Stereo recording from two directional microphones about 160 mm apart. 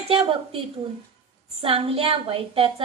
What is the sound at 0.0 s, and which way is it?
Speech, 35° right (ahead or behind).